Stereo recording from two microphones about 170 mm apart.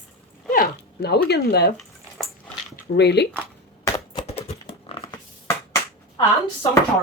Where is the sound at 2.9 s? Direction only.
80° left.